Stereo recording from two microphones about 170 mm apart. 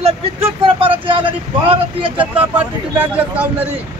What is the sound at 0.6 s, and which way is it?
Speech, 30° right (ahead or behind).